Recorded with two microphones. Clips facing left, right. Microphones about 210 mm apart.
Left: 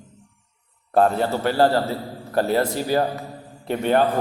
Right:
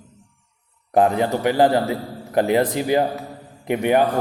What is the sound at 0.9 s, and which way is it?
A man's voice, 15° right (ahead or behind).